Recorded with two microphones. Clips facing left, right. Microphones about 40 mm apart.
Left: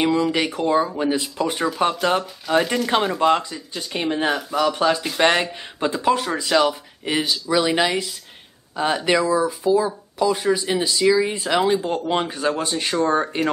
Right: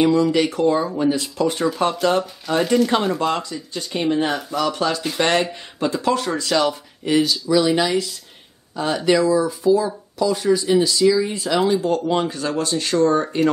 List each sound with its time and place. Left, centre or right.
0.0 s speech: centre
3.2 s speech: centre